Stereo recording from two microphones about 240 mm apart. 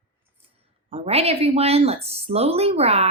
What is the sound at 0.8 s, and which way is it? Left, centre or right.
Speech, right.